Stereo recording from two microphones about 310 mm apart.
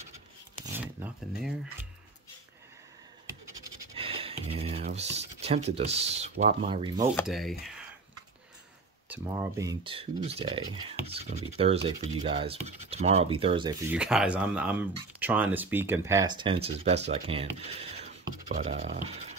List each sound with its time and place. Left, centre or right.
0.7 s a sound: centre
3.3 s scratch: centre
7.2 s speech: centre
9.1 s speech: centre
13.9 s speech: centre; by 19.3 s right